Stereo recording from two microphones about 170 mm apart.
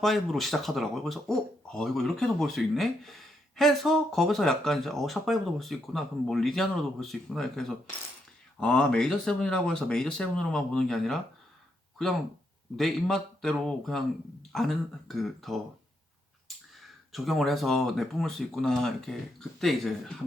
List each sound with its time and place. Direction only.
0.0 s speech: centre (ahead or behind)
12.7 s speech: centre (ahead or behind)
16.5 s a sound: centre (ahead or behind)
17.1 s speech: centre (ahead or behind)